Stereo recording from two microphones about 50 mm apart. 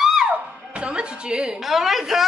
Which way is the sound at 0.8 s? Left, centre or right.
Centre.